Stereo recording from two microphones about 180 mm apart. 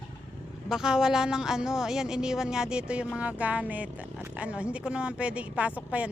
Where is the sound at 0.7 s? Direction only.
5° right (ahead or behind).